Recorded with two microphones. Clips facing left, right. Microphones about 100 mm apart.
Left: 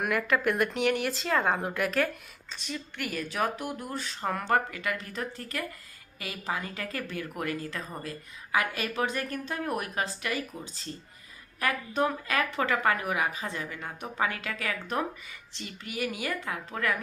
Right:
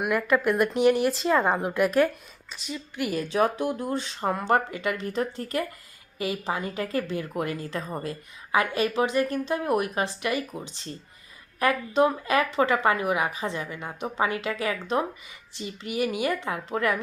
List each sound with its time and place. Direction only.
0.0 s speech: 15° right (ahead or behind)
2.5 s a woman's voice: 10° right (ahead or behind)
3.2 s speech: 30° right (ahead or behind)
3.9 s speech: 45° left (ahead or behind)
4.2 s speech: 25° right (ahead or behind)
6.1 s speech: 25° right (ahead or behind)